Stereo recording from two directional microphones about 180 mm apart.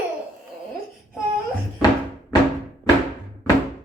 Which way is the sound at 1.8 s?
20° left (ahead or behind).